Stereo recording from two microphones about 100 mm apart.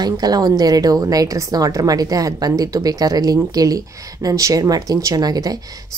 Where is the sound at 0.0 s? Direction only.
40° right (ahead or behind).